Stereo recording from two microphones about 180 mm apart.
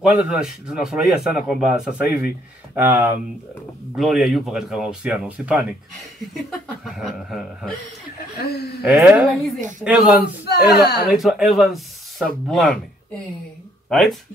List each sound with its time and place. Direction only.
0.0 s a man's voice: 5° right (ahead or behind)
3.9 s a man's voice: centre (ahead or behind)
6.8 s a man's voice: centre (ahead or behind)
8.4 s speech: 60° left (ahead or behind)
8.8 s speech: 10° right (ahead or behind)
10.5 s speech: 65° left (ahead or behind)
11.1 s a man's voice: centre (ahead or behind)
13.8 s speech: centre (ahead or behind)